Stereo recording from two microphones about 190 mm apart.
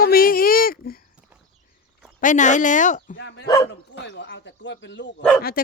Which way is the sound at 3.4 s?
20° left (ahead or behind).